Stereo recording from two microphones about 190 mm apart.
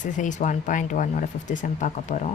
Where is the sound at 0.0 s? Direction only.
40° left (ahead or behind).